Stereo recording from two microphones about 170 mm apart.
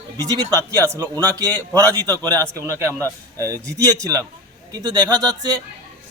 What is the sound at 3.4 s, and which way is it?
A man's voice, 20° right (ahead or behind).